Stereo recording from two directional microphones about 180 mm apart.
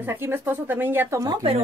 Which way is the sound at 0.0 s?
10° right (ahead or behind).